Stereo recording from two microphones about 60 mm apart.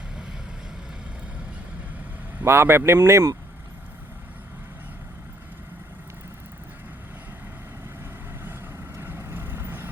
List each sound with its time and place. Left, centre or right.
2.4 s speech: right
9.0 s vehicle: right